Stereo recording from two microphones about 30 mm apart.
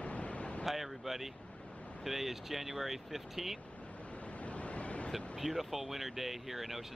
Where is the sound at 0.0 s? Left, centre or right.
Left.